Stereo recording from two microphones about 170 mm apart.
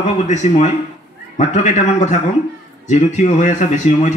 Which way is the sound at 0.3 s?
45° left (ahead or behind).